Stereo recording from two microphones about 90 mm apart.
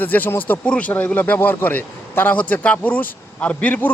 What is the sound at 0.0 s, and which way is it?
A man's voice, 20° left (ahead or behind).